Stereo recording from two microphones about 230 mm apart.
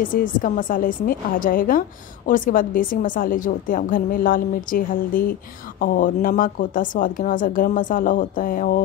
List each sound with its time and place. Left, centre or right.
0.0 s a woman's voice: left